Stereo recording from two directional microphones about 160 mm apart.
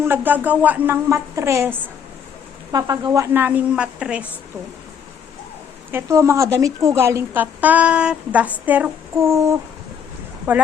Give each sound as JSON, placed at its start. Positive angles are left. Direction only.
{"t": 0.0, "sound": "a woman's voice", "side_deg": -10}
{"t": 5.9, "sound": "a woman's voice", "side_deg": -20}